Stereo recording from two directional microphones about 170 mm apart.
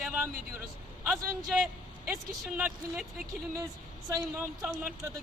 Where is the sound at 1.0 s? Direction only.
15° right (ahead or behind).